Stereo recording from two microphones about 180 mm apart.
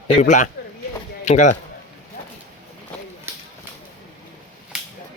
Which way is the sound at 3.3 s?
15° right (ahead or behind).